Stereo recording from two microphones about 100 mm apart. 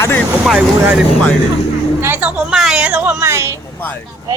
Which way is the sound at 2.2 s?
5° right (ahead or behind).